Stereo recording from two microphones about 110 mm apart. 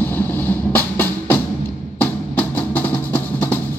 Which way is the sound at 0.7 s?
15° left (ahead or behind).